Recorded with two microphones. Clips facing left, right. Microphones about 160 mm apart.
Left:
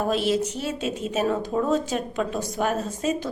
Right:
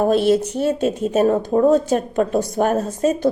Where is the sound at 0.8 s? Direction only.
40° right (ahead or behind).